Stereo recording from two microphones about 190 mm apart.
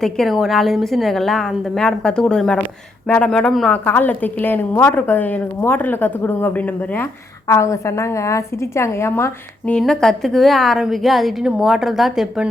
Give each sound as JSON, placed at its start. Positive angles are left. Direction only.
{"t": 0.0, "sound": "a woman's voice", "side_deg": 0}